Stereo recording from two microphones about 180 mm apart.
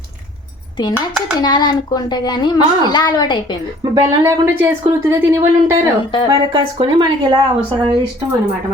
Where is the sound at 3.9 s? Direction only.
15° right (ahead or behind).